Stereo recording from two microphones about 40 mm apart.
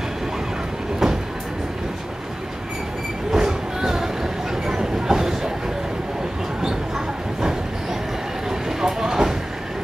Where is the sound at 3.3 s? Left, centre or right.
Centre.